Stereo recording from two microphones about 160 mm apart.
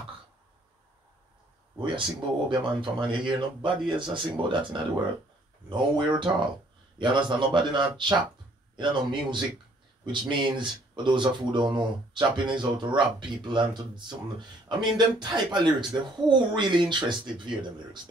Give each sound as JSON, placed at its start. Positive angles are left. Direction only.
{"t": 1.8, "sound": "speech", "side_deg": -30}